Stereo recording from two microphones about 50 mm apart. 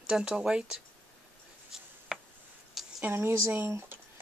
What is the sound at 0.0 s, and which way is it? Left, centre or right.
Speech, centre.